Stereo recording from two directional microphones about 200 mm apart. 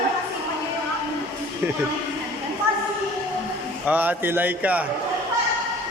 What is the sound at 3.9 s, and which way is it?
Speech, 10° right (ahead or behind).